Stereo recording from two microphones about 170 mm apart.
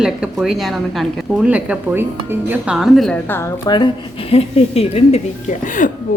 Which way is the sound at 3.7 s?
25° left (ahead or behind).